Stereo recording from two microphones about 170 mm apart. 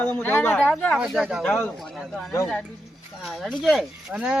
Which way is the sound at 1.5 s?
10° left (ahead or behind).